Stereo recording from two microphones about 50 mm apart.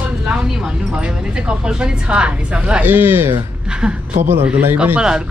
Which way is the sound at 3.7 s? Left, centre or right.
Centre.